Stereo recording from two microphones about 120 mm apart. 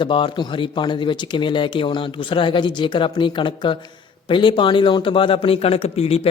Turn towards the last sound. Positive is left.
turn(degrees=55)  # may be behind; listen again after turning